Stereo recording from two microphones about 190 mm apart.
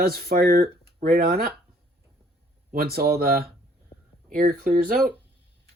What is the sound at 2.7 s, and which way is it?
Speech, 55° right (ahead or behind).